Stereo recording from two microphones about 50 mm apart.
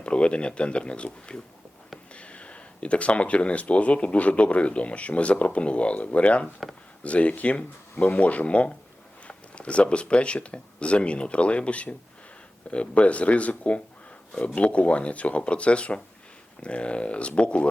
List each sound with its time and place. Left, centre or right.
0.0 s speech: left